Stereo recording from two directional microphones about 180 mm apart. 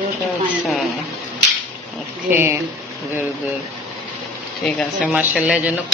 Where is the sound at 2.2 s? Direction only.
15° right (ahead or behind).